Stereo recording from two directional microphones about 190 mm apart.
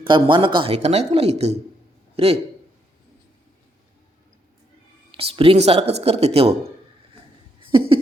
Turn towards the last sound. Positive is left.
turn(degrees=-25)  # may be behind; listen again after turning